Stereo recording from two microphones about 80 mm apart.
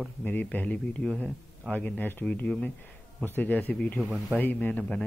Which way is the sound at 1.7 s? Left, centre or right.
Centre.